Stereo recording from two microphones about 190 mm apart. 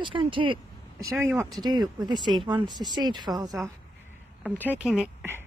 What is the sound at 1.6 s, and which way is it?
Speech, 20° right (ahead or behind).